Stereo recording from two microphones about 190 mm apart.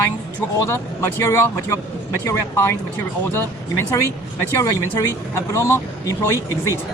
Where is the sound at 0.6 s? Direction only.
15° left (ahead or behind).